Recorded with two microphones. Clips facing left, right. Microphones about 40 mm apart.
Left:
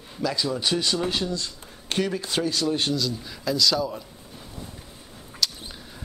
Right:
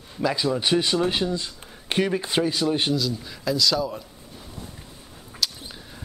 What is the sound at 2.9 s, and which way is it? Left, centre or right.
Speech, centre.